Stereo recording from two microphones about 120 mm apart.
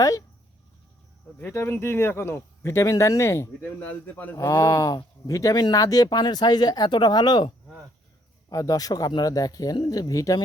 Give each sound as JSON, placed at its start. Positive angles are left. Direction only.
{"t": 0.0, "sound": "speech", "side_deg": 30}
{"t": 1.4, "sound": "speech", "side_deg": 20}
{"t": 4.4, "sound": "speech", "side_deg": 25}